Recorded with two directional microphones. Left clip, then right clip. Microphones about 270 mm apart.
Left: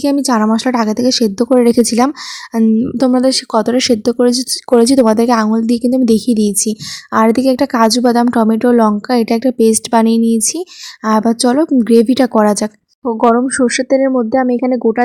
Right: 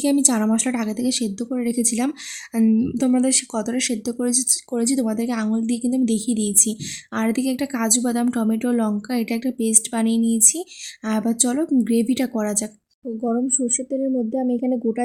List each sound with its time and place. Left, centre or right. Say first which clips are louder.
0.0 s speech: left 7 dB; centre